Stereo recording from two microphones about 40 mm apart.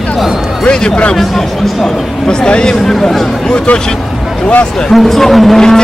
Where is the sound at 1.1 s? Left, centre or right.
Centre.